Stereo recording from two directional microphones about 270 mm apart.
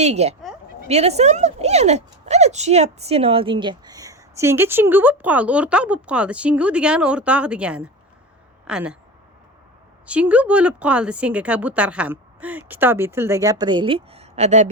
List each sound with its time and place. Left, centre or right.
0.0 s speech: right; by 9.0 s centre
10.1 s speech: centre; by 14.7 s right